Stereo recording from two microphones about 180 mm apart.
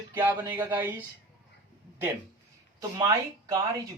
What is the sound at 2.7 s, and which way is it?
Speech, 20° right (ahead or behind).